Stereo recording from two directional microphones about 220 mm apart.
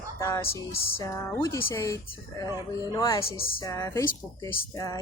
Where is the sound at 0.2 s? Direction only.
15° left (ahead or behind).